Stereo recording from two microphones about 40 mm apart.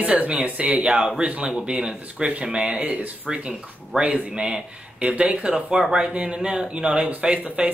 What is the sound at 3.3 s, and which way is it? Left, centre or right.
A woman's voice, right.